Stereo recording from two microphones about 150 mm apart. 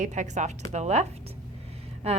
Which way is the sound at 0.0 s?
55° right (ahead or behind).